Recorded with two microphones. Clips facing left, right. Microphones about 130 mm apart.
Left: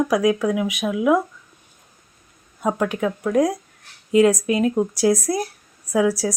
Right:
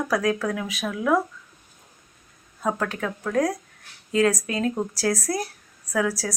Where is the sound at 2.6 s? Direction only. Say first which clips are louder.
Left 5 dB; 15° left (ahead or behind).